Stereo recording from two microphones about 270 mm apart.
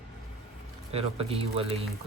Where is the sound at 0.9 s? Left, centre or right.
Right.